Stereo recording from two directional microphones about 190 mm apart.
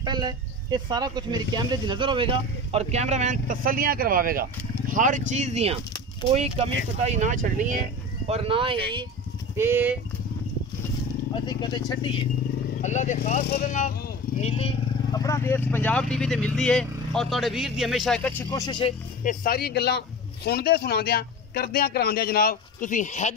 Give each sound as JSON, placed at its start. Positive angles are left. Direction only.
{"t": 0.0, "sound": "speech", "side_deg": -20}
{"t": 8.3, "sound": "speech", "side_deg": -30}
{"t": 9.6, "sound": "speech", "side_deg": -10}
{"t": 11.3, "sound": "speech", "side_deg": 20}
{"t": 12.8, "sound": "speech", "side_deg": 40}
{"t": 14.4, "sound": "speech", "side_deg": 30}
{"t": 15.0, "sound": "speech", "side_deg": 20}
{"t": 18.5, "sound": "speech", "side_deg": 20}
{"t": 19.2, "sound": "a man's voice", "side_deg": 50}